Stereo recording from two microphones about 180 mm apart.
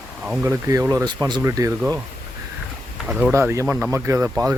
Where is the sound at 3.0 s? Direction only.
5° right (ahead or behind).